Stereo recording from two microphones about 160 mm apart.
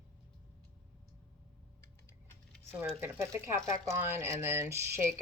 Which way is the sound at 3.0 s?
15° right (ahead or behind).